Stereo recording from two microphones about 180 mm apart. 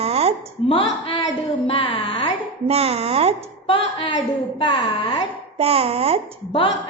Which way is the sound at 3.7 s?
30° left (ahead or behind).